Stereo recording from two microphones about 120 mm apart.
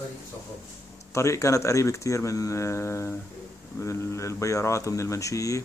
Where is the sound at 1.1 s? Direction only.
25° left (ahead or behind).